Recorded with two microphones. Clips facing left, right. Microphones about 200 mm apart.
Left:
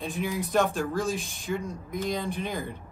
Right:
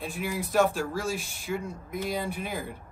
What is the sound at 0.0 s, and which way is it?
A man's voice, 5° right (ahead or behind).